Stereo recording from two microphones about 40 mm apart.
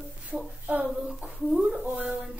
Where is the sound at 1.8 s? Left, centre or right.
Right.